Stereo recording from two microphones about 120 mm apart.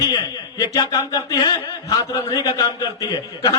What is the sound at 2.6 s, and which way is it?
Speech, 40° left (ahead or behind).